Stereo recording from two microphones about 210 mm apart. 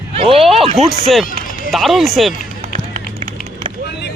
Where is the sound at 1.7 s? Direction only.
Centre (ahead or behind).